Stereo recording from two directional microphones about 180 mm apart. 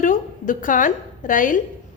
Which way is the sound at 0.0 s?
45° left (ahead or behind).